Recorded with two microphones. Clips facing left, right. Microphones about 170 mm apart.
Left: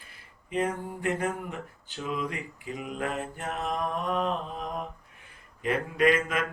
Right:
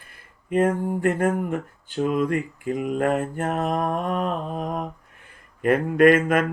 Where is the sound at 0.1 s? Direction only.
50° right (ahead or behind).